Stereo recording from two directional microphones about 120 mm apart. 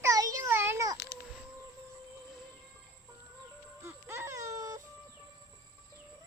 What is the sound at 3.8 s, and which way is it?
Baby cry, 20° right (ahead or behind).